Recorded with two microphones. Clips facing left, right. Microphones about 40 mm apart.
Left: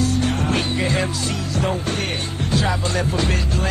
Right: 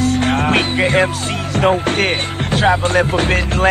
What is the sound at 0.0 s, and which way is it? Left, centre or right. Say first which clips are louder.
Music: right 5 dB; right.